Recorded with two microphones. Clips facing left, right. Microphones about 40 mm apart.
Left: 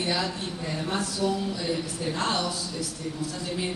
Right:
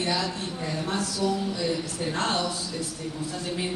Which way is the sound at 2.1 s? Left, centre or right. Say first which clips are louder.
Right 1 dB; right.